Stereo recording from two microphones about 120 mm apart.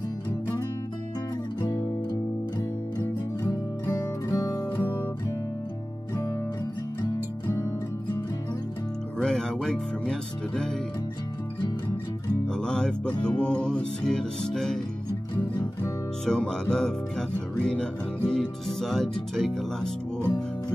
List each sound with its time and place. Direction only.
1.6 s music: 30° left (ahead or behind)
3.8 s music: 30° left (ahead or behind)
9.2 s speech: 5° left (ahead or behind)
12.4 s music: 5° left (ahead or behind)
16.3 s music: 5° left (ahead or behind)